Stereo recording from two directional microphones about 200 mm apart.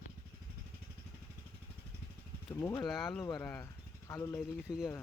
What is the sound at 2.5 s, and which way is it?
Speech, 15° left (ahead or behind).